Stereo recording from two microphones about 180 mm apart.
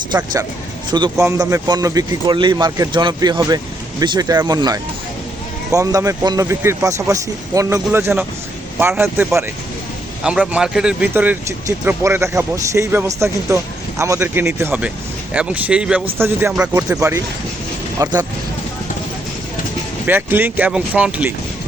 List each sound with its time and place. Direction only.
0.9 s a man's voice: 25° right (ahead or behind)
20.1 s speech: 10° right (ahead or behind)